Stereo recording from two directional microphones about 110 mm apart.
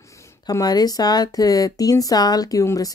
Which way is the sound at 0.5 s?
35° left (ahead or behind).